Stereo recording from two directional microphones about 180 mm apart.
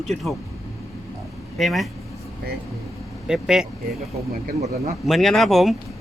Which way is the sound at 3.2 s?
5° right (ahead or behind).